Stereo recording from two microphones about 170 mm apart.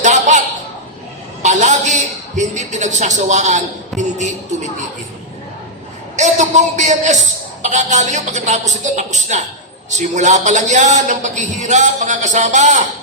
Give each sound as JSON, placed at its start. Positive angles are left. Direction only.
{"t": 0.0, "sound": "a sound", "side_deg": -45}
{"t": 1.4, "sound": "a man's voice", "side_deg": -45}
{"t": 6.1, "sound": "a man's voice", "side_deg": -45}